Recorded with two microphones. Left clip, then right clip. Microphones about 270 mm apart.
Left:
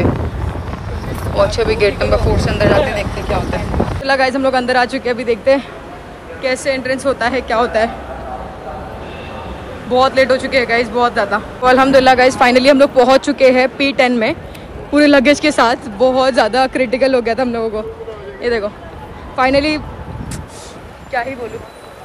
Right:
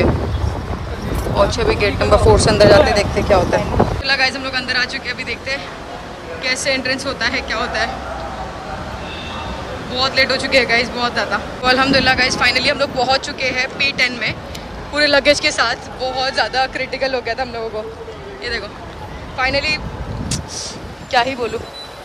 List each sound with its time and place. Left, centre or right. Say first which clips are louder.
1.3 s speech: left 2 dB; centre
2.3 s speech: right 4 dB; centre
4.0 s a man's voice: left 4 dB; centre
9.9 s a man's voice: left 5 dB; centre
21.1 s speech: right 4 dB; centre